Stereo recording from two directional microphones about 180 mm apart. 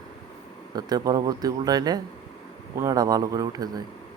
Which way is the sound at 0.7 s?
20° right (ahead or behind).